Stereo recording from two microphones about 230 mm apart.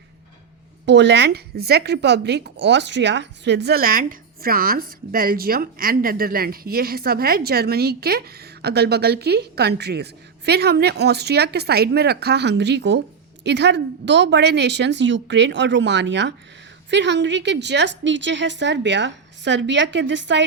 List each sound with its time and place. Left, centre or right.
0.9 s speech: right